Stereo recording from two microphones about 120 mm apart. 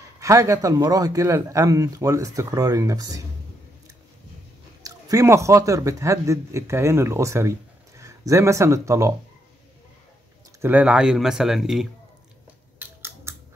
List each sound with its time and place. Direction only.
0.2 s speech: 25° right (ahead or behind)
4.8 s speech: 30° right (ahead or behind)
10.6 s speech: 15° right (ahead or behind)
12.7 s scissors: 20° right (ahead or behind)